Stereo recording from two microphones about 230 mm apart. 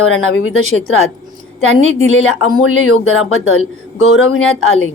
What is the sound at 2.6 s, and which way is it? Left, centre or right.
Speech, left.